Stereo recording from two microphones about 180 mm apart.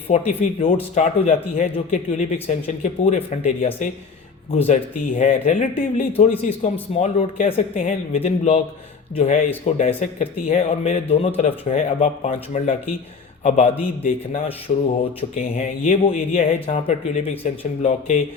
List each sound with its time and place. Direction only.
0.3 s a man's voice: 35° left (ahead or behind)